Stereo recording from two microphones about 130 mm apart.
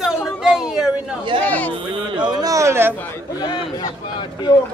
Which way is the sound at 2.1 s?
30° right (ahead or behind).